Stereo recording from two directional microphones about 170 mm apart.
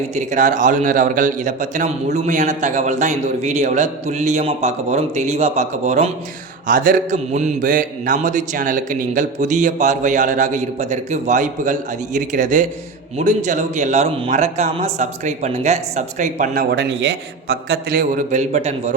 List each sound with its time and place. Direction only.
0.1 s mantra: 45° right (ahead or behind)
6.7 s mantra: 50° right (ahead or behind)
16.7 s a man's voice: 75° right (ahead or behind); by 18.1 s 60° right (ahead or behind)
18.3 s mantra: 45° right (ahead or behind)